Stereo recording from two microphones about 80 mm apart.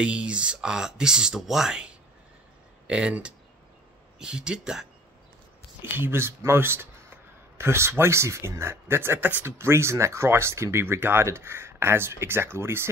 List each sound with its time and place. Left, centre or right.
0.0 s speech: centre
5.8 s speech: right